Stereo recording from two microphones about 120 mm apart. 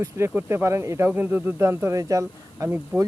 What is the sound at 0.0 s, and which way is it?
Speech, 20° right (ahead or behind).